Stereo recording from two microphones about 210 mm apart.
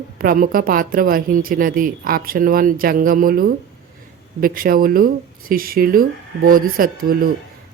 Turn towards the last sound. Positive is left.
turn(degrees=-45)  # may be behind; listen again after turning